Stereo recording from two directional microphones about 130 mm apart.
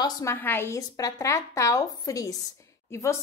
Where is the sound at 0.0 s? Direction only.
20° left (ahead or behind).